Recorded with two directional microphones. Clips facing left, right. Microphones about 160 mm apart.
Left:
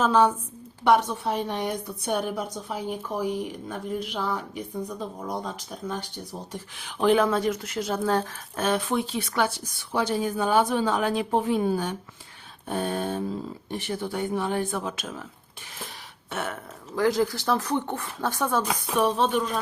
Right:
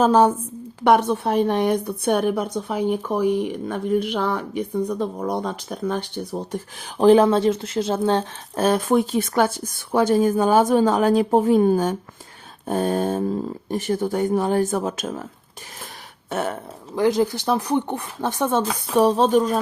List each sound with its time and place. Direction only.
0.0 s a woman's voice: 40° right (ahead or behind)
0.9 s a woman's voice: 55° right (ahead or behind)
7.0 s speech: 30° right (ahead or behind)
8.5 s speech: 40° right (ahead or behind)
16.3 s a woman's voice: 40° right (ahead or behind)
16.9 s speech: 20° right (ahead or behind); by 19.5 s 40° right (ahead or behind)